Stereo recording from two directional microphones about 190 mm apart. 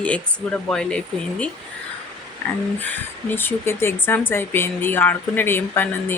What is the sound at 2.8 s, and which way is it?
Speech, 10° left (ahead or behind).